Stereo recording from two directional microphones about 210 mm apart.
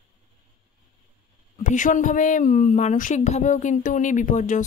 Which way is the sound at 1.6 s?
35° left (ahead or behind).